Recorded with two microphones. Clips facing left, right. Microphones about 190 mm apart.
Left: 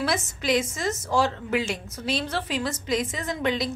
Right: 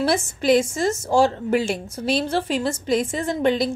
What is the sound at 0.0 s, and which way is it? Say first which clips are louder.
A woman's voice: right 6 dB; 30° right (ahead or behind).